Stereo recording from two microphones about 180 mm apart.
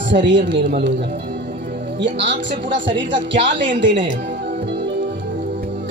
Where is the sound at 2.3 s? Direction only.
85° right.